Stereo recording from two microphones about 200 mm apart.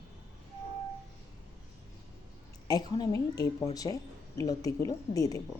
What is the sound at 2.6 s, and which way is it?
A woman's voice, 20° left (ahead or behind).